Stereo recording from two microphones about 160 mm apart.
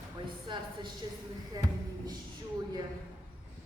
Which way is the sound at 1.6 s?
25° right (ahead or behind).